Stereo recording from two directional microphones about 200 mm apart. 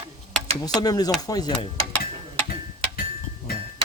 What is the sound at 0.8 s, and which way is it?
Speech, 20° left (ahead or behind).